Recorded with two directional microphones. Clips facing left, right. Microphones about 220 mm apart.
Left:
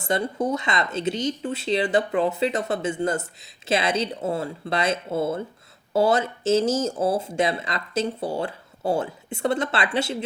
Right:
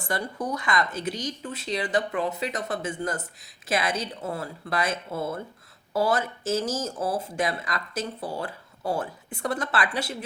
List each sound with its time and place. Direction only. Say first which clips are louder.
0.0 s speech: left 6 dB; 25° left (ahead or behind)